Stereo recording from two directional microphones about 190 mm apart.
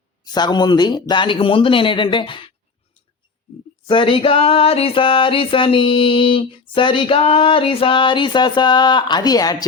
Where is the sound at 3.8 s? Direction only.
30° left (ahead or behind).